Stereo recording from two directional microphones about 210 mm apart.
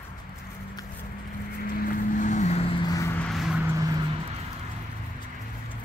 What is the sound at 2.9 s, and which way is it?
Vehicle, 15° left (ahead or behind).